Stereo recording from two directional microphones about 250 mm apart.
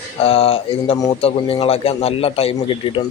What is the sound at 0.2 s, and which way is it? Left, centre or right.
A man's voice, left.